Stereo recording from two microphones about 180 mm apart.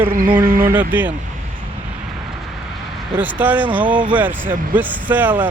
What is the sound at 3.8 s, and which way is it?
Speech, 25° right (ahead or behind).